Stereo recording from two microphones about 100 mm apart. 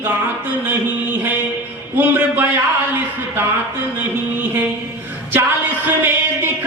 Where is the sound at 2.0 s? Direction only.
20° right (ahead or behind).